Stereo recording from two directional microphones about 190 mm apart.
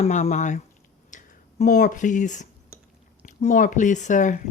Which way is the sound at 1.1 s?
40° left (ahead or behind).